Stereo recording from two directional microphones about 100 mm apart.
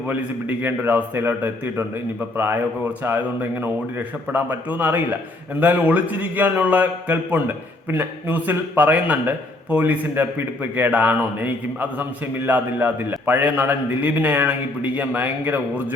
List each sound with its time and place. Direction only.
0.1 s a man's voice: 15° right (ahead or behind)